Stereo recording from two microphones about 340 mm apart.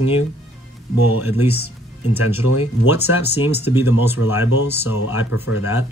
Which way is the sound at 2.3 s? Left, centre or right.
Centre.